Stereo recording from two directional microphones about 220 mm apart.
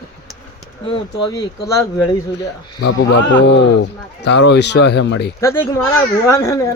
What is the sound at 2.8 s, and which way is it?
Speech, 55° left (ahead or behind).